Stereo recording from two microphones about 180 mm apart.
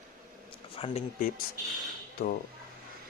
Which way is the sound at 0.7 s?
30° left (ahead or behind).